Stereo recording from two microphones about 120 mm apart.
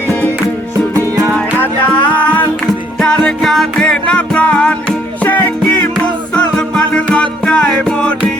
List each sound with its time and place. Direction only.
0.9 s music: 25° right (ahead or behind)
1.4 s music: 15° left (ahead or behind)
6.3 s music: 10° left (ahead or behind)